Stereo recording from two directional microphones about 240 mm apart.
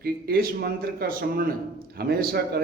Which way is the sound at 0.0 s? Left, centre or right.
Right.